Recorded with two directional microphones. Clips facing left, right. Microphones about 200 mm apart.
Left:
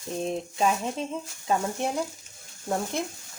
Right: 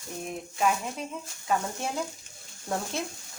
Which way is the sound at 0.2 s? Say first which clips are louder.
Left 3 dB; 30° left (ahead or behind).